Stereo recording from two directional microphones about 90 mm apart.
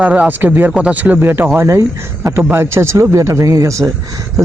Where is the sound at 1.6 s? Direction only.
35° right (ahead or behind).